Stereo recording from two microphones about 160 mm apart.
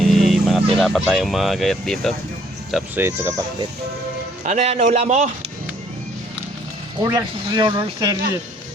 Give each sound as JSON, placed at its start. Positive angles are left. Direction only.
{"t": 0.2, "sound": "speech", "side_deg": 0}
{"t": 2.9, "sound": "speech", "side_deg": -15}
{"t": 4.4, "sound": "a man's voice", "side_deg": -45}
{"t": 7.0, "sound": "speech", "side_deg": -20}